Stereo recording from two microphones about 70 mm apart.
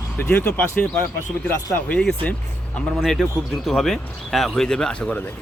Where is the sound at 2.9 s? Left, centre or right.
Centre.